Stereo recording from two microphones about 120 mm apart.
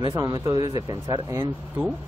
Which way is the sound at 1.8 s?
20° right (ahead or behind).